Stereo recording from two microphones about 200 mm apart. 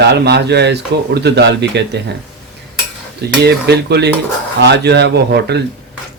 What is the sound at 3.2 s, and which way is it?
Speech, 55° right (ahead or behind).